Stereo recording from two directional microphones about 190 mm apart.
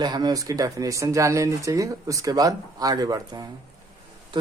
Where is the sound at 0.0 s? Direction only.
20° right (ahead or behind).